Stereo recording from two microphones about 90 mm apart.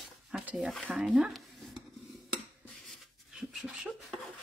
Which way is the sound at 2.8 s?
Centre (ahead or behind).